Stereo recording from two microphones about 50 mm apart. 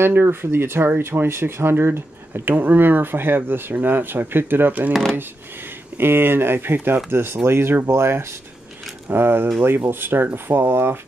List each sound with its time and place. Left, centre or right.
0.1 s speech: right
2.5 s speech: right
9.1 s speech: right